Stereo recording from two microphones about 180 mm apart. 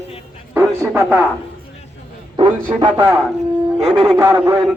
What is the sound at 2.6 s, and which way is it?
Speech, 20° right (ahead or behind).